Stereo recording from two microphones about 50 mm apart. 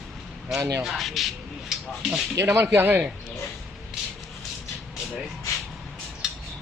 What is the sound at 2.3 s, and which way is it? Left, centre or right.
Speech, right.